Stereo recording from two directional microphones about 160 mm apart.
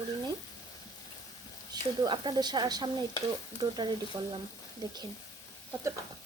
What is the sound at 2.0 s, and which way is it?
Speech, 30° right (ahead or behind).